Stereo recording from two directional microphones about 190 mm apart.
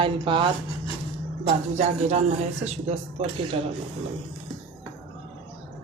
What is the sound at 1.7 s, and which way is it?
Speech, 35° right (ahead or behind).